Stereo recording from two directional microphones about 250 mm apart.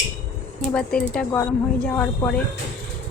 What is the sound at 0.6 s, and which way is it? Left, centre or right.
Speech, centre.